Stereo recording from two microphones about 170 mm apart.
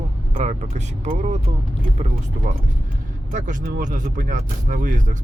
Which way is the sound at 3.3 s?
50° right (ahead or behind).